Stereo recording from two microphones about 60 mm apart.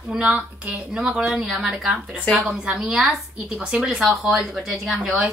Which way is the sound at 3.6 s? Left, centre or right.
Centre.